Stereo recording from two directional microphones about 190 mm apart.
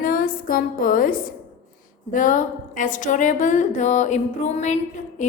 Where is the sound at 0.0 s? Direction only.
45° left (ahead or behind).